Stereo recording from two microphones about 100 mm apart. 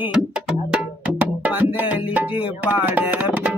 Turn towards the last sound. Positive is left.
turn(degrees=-15)  # may be behind; listen again after turning